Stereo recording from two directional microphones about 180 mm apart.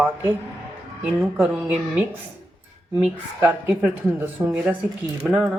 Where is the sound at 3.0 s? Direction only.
10° right (ahead or behind).